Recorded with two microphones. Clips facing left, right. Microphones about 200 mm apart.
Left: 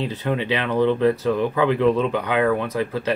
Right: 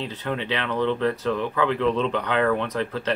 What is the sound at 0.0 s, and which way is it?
Speech, 10° left (ahead or behind).